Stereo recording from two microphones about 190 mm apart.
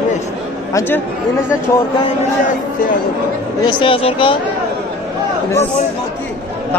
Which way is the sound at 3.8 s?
30° left (ahead or behind).